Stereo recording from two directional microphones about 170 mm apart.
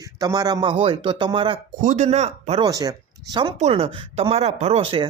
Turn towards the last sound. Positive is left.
turn(degrees=-30)  # may be behind; listen again after turning